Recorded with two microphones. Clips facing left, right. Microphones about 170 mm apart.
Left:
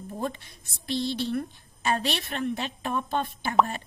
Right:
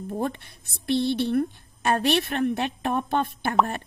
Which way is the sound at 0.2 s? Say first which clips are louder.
Right 1 dB; 60° right (ahead or behind).